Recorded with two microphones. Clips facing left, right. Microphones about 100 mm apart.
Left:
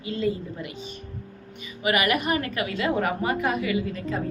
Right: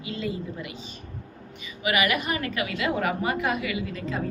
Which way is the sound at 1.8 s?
45° left (ahead or behind).